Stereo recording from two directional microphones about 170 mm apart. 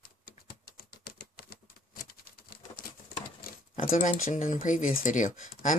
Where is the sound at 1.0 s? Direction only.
65° left (ahead or behind).